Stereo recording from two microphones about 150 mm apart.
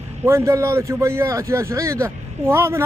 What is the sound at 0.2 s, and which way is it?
A man's voice, 20° right (ahead or behind).